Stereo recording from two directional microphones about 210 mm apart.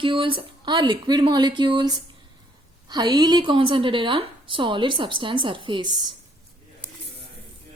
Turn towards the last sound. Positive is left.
turn(degrees=-20)  # may be behind; listen again after turning